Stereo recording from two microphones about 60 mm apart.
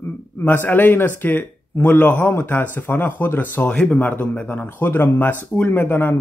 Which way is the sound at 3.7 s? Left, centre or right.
Centre.